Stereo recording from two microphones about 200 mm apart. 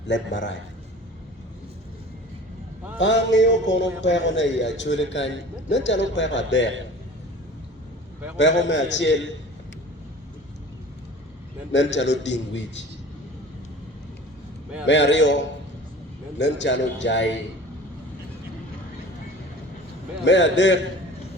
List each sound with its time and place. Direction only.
0.1 s a man's voice: 60° left (ahead or behind)
3.0 s a man's voice: 65° left (ahead or behind)
8.4 s a man's voice: 65° left (ahead or behind)
11.7 s a man's voice: 65° left (ahead or behind)
14.8 s a man's voice: 65° left (ahead or behind)
20.2 s a man's voice: 65° left (ahead or behind)